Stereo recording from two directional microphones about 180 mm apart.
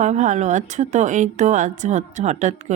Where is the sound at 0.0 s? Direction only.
40° right (ahead or behind).